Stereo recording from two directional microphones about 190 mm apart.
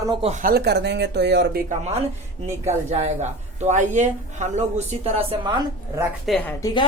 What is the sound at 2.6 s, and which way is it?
A man's voice, 35° right (ahead or behind).